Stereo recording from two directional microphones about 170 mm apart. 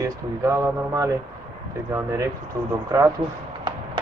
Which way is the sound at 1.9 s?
20° right (ahead or behind).